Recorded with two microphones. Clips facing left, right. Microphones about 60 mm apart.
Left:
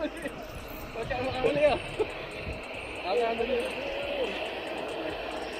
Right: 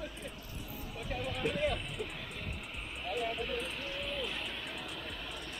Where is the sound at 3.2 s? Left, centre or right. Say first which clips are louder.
Left 8 dB; left.